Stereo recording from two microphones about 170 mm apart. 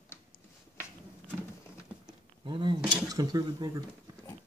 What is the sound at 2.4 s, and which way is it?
Speech, 30° right (ahead or behind).